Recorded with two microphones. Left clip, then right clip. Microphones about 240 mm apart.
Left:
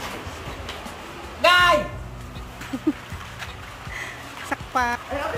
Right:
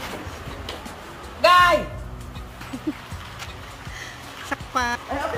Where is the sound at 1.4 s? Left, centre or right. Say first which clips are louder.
Right 1 dB; centre.